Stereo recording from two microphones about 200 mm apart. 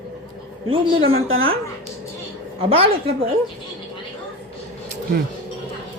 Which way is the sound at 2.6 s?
30° right (ahead or behind).